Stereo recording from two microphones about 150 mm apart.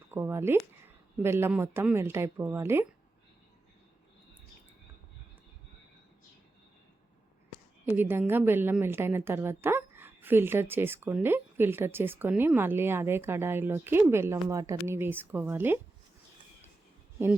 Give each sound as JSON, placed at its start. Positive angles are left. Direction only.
{"t": 0.1, "sound": "a woman's voice", "side_deg": -15}
{"t": 7.9, "sound": "a woman's voice", "side_deg": -15}